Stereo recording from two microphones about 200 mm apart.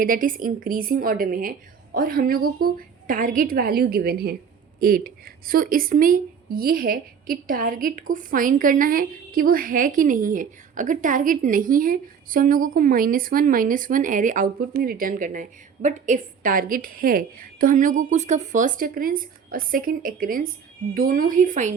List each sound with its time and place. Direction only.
0.0 s a woman's voice: 45° right (ahead or behind)